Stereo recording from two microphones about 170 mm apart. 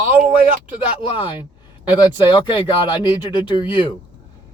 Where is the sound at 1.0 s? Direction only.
30° left (ahead or behind).